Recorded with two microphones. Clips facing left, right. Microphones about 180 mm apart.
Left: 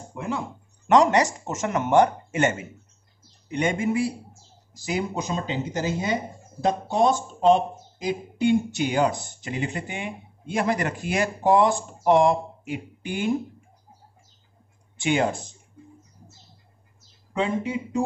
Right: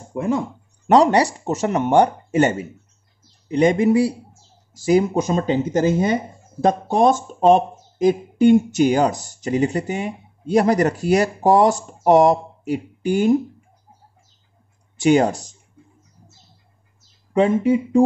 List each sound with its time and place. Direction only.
0.1 s speech: 45° right (ahead or behind)
0.8 s speech: 35° right (ahead or behind)
15.0 s speech: 40° right (ahead or behind)
17.3 s speech: 50° right (ahead or behind)